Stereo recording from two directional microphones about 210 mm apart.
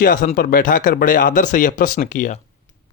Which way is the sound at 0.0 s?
40° left (ahead or behind).